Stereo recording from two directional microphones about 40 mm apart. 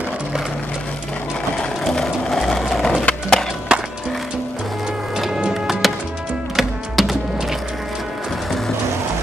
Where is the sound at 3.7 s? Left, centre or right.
Right.